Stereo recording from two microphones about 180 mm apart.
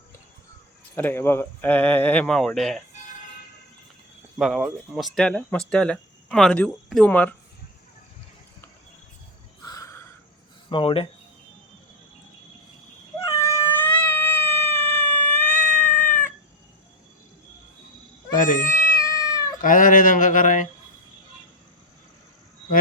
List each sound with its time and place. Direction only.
0.9 s speech: 10° left (ahead or behind)
4.4 s speech: centre (ahead or behind)
9.6 s crow: 20° left (ahead or behind)
10.7 s speech: 30° left (ahead or behind)
13.7 s cat: 10° left (ahead or behind)
18.3 s cat: 50° left (ahead or behind)
19.0 s cat: 20° left (ahead or behind)
19.6 s a sound: 50° left (ahead or behind)